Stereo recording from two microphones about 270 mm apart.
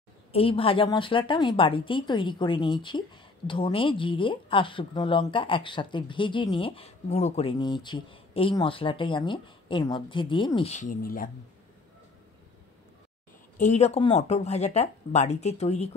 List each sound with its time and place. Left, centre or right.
0.3 s speech: left
13.6 s speech: left